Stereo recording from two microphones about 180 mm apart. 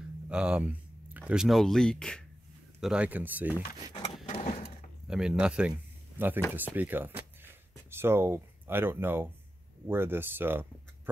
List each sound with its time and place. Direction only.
0.3 s speech: 5° right (ahead or behind)
2.8 s speech: 5° right (ahead or behind)
4.3 s a sound: 35° left (ahead or behind)
5.0 s speech: 5° right (ahead or behind)